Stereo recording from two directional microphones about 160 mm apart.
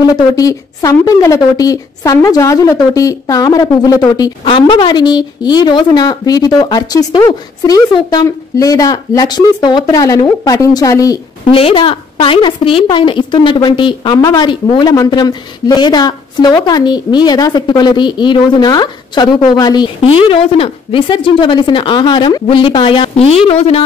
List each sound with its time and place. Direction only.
0.0 s a woman's voice: 20° left (ahead or behind)
11.5 s a woman's voice: 35° left (ahead or behind)